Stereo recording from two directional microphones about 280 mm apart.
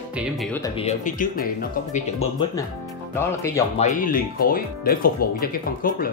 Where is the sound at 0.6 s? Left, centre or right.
Left.